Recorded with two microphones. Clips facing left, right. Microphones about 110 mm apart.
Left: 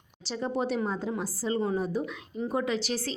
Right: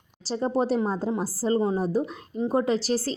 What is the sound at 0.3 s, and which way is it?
A woman's voice, 35° right (ahead or behind).